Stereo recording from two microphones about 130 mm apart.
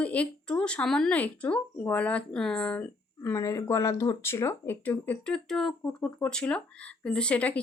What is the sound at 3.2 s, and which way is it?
Speech, 25° left (ahead or behind).